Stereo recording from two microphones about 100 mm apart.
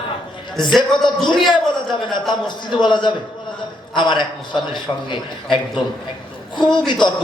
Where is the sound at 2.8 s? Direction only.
50° left (ahead or behind).